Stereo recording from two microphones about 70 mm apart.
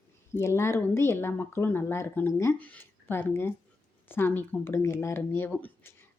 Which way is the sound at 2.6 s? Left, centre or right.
Left.